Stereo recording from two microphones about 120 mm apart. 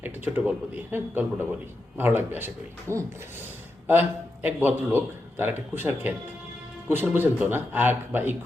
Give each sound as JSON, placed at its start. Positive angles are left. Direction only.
{"t": 0.0, "sound": "a man's voice", "side_deg": -15}
{"t": 4.4, "sound": "a man's voice", "side_deg": -15}